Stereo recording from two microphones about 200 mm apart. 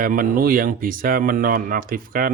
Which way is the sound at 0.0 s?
45° right (ahead or behind).